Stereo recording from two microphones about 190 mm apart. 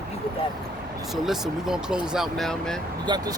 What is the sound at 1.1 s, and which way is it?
Speech, centre (ahead or behind).